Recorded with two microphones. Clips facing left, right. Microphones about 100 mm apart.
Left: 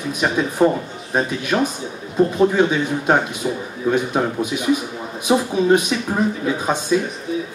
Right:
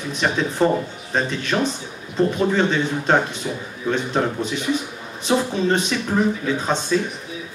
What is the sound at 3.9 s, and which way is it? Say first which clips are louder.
Speech: left 2 dB; 10° left (ahead or behind).